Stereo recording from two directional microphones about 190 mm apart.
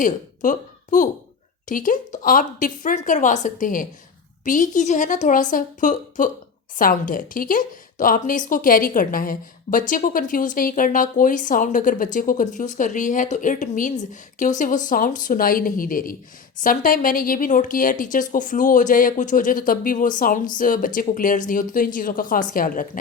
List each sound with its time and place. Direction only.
0.0 s a woman's voice: 45° left (ahead or behind)